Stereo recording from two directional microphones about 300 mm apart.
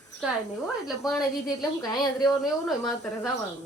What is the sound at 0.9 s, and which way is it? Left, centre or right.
Speech, centre.